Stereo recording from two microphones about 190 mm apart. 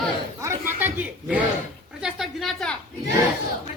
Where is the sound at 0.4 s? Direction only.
10° right (ahead or behind).